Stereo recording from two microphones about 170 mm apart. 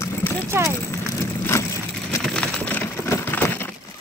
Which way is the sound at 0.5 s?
15° right (ahead or behind).